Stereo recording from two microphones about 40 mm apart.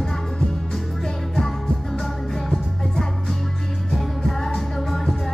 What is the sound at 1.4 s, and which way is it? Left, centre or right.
Music, centre.